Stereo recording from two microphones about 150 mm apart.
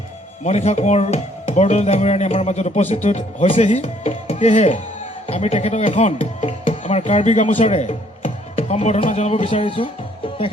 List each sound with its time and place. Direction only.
0.4 s speech: 45° left (ahead or behind)